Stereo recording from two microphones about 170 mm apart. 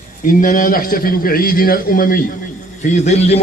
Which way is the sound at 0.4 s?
55° left (ahead or behind).